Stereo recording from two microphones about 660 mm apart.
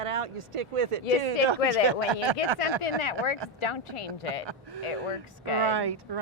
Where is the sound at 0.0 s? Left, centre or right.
Right.